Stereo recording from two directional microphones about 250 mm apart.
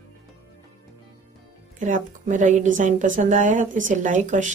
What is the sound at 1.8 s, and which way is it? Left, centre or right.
A woman's voice, right.